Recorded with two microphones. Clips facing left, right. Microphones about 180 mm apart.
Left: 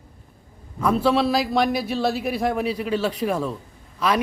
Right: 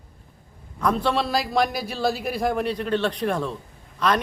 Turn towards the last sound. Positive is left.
turn(degrees=5)  # may be behind; listen again after turning